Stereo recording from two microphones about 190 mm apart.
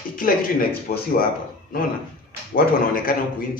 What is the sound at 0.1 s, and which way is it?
Speech, 50° left (ahead or behind).